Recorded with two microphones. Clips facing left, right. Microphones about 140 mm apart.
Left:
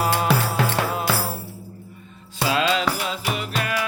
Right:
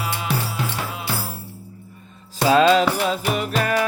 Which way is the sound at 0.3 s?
80° left.